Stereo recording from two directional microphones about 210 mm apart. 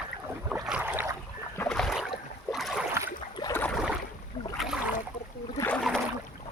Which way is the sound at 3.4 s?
15° left (ahead or behind).